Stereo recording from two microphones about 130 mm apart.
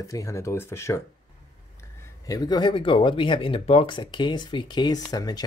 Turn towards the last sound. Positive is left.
turn(degrees=30)  # may be behind; listen again after turning